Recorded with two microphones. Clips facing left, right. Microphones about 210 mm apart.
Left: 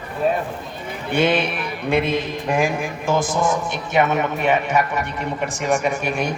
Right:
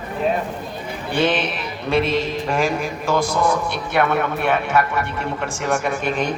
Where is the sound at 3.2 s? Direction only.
45° left (ahead or behind).